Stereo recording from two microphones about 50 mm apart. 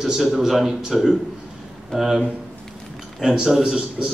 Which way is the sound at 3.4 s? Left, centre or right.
Centre.